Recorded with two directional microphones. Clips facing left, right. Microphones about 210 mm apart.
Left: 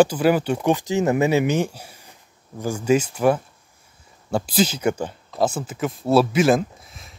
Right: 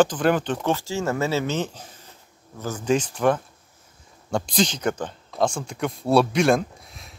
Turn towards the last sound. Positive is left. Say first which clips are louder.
# even
turn(degrees=0)  # may be behind; listen again after turning